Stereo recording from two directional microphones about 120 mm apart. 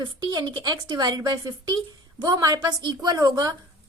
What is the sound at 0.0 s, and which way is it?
Speech, 40° right (ahead or behind).